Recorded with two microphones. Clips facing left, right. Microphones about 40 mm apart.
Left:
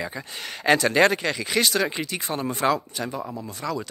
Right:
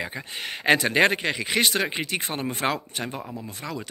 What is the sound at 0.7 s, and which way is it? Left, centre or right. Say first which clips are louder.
Speech: left 1 dB; right.